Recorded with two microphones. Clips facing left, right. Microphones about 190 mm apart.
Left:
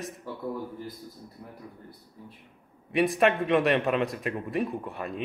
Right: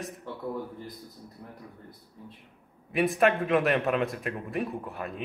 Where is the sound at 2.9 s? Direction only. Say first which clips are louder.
Left 1 dB; centre (ahead or behind).